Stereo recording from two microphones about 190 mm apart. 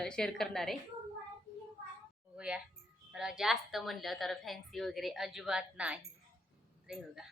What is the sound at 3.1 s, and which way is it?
A woman's voice, 5° right (ahead or behind).